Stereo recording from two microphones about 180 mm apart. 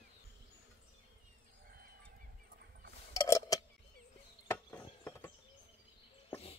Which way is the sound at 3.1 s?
15° left (ahead or behind).